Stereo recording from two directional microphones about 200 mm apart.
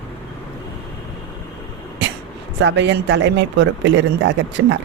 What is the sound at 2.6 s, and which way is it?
Speech, 60° right (ahead or behind).